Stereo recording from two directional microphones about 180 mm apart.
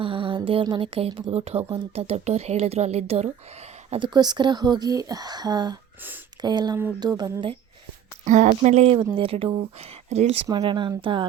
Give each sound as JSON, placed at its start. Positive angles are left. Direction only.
{"t": 0.0, "sound": "speech", "side_deg": -30}
{"t": 8.2, "sound": "speech", "side_deg": -45}
{"t": 10.5, "sound": "speech", "side_deg": -25}